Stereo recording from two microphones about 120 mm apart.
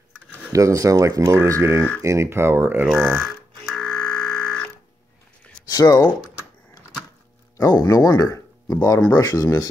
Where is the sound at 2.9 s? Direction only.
10° right (ahead or behind).